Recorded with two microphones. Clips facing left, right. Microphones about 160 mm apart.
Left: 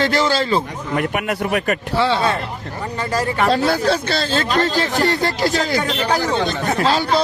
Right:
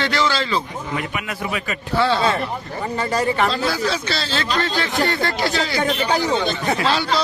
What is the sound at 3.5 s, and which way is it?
A man's voice, 60° left (ahead or behind).